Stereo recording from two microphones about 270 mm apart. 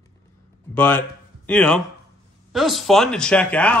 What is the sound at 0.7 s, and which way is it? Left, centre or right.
A man's voice, centre.